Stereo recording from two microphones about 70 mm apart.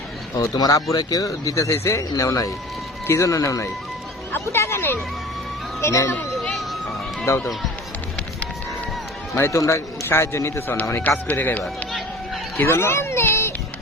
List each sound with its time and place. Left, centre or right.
0.5 s speech: left
4.3 s speech: left
6.5 s music: centre
7.3 s speech: left
9.3 s speech: left
11.3 s speech: left
11.6 s run: centre
12.5 s a child's voice: left